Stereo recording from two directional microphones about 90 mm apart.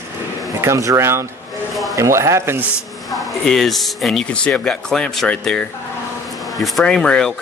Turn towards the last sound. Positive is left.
turn(degrees=5)  # may be behind; listen again after turning